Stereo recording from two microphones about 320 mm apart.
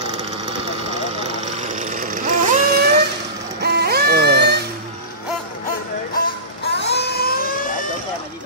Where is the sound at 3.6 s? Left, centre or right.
Right.